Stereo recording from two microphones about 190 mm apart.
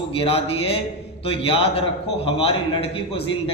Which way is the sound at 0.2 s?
30° left (ahead or behind).